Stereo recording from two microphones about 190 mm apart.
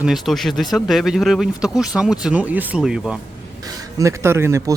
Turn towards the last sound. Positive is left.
turn(degrees=-15)  # may be behind; listen again after turning